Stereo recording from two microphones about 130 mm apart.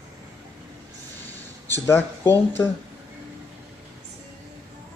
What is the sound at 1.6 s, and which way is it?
Speech, 15° left (ahead or behind).